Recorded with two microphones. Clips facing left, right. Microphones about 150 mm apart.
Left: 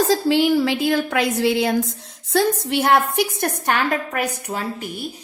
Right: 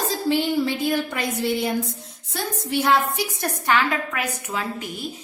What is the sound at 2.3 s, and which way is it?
A woman's voice, 80° left.